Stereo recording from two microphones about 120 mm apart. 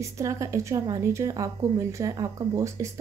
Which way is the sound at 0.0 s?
25° right (ahead or behind).